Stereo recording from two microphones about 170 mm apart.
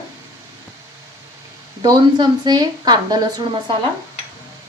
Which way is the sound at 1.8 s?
25° right (ahead or behind).